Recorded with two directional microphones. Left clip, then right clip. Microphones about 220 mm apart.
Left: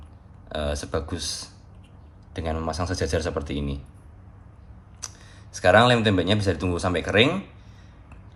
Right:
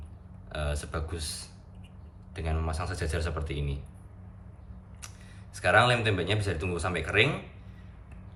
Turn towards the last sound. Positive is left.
turn(degrees=25)  # may be behind; listen again after turning